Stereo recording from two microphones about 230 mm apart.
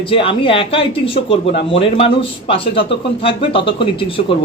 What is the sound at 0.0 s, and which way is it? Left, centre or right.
Speech, left.